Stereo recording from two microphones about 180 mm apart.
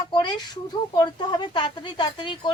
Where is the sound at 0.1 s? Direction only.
25° left (ahead or behind).